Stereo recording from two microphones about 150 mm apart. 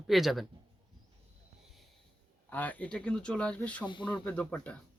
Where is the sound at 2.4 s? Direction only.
10° left (ahead or behind).